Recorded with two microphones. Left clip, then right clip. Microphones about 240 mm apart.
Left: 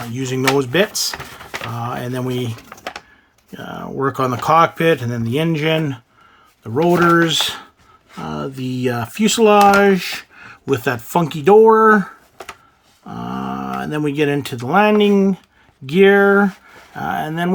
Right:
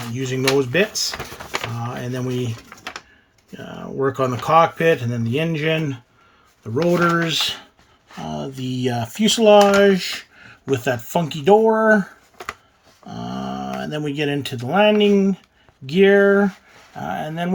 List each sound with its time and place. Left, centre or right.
0.2 s speech: left
2.7 s typing: left
3.5 s speech: left
7.0 s speech: centre
13.1 s speech: centre